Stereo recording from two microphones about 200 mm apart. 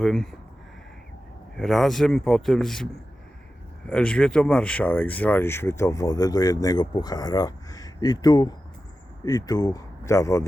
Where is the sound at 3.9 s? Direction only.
5° left (ahead or behind).